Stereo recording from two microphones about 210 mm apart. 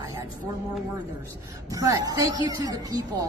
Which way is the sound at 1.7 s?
15° right (ahead or behind).